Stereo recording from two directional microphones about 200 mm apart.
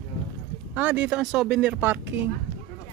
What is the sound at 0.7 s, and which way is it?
Speech, 10° right (ahead or behind).